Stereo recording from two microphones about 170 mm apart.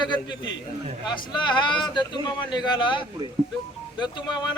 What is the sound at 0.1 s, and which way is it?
A man's voice, 25° left (ahead or behind).